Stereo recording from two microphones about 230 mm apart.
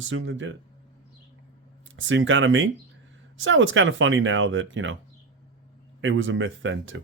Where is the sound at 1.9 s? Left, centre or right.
Right.